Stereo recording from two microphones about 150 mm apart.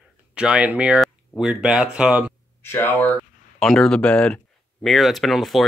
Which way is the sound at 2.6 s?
15° left (ahead or behind).